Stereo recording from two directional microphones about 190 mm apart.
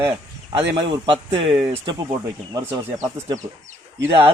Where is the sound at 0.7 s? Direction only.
25° right (ahead or behind).